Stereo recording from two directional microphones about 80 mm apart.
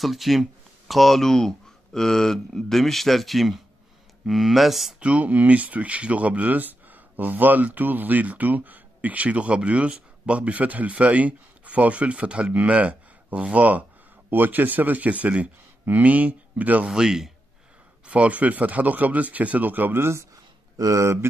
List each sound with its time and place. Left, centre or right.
0.0 s speech: centre
5.0 s speech: centre
16.9 s speech: centre; by 20.2 s right
20.7 s speech: right